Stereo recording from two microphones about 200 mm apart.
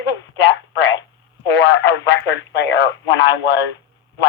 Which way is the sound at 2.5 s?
60° left (ahead or behind).